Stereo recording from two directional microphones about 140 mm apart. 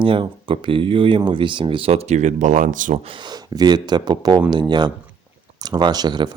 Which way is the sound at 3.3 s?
30° right (ahead or behind).